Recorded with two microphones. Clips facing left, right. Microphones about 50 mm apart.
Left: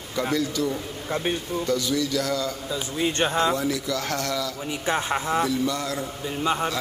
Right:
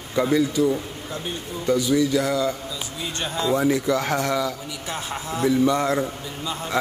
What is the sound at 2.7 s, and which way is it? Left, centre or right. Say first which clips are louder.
Speech: left 5 dB; left.